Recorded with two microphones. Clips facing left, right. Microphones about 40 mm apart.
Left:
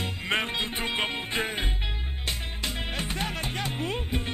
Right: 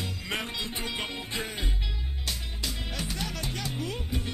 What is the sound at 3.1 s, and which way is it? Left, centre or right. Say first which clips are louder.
Music: left 4 dB; left.